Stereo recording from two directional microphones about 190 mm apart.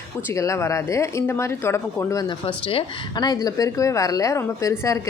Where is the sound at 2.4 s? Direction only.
30° left (ahead or behind).